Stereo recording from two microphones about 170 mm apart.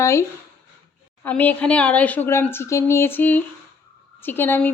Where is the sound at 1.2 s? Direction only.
10° left (ahead or behind).